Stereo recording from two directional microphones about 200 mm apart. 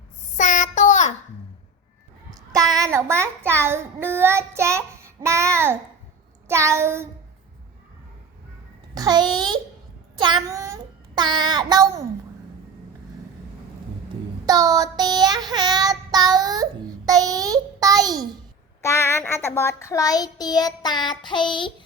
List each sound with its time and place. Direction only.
0.3 s child singing: 35° left (ahead or behind)
2.8 s child singing: 15° right (ahead or behind)
9.0 s a sound: 20° right (ahead or behind)
10.2 s child singing: 20° right (ahead or behind)
14.4 s child singing: 20° right (ahead or behind)
18.8 s child singing: 15° left (ahead or behind)